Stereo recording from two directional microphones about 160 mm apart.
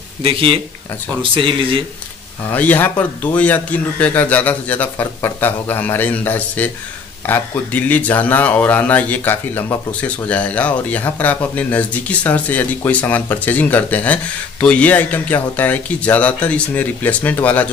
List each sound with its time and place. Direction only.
0.2 s speech: 35° right (ahead or behind)
2.5 s speech: 10° left (ahead or behind)